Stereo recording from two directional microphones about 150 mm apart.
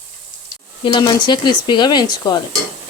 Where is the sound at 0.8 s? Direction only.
30° left (ahead or behind).